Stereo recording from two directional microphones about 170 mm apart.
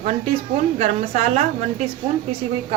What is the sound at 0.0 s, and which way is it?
A woman's voice, 40° right (ahead or behind).